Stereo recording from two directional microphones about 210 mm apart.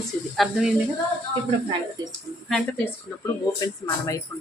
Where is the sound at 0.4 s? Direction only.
Centre (ahead or behind).